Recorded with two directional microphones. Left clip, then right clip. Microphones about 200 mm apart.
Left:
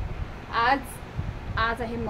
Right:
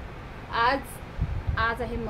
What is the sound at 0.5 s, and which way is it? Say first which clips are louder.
Speech: left 1 dB; 20° left (ahead or behind).